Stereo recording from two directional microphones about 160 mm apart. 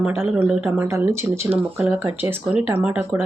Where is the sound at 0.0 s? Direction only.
10° right (ahead or behind).